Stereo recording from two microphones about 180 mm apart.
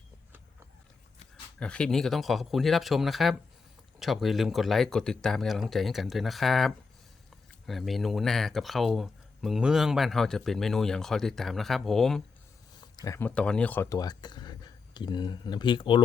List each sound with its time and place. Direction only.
1.5 s speech: 5° left (ahead or behind)
12.8 s speech: 20° left (ahead or behind)
14.0 s speech: 25° left (ahead or behind)